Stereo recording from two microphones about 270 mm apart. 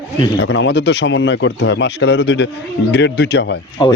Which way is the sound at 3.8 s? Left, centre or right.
Centre.